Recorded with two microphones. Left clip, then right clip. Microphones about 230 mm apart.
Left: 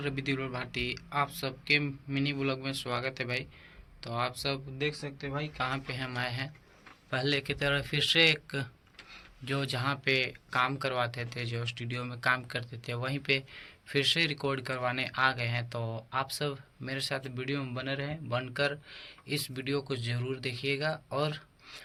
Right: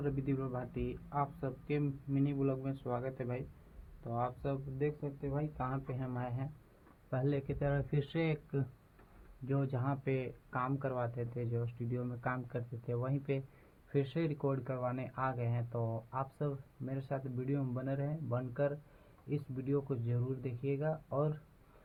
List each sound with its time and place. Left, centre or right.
0.0 s speech: centre
9.6 s speech: centre
15.7 s speech: left
16.1 s speech: centre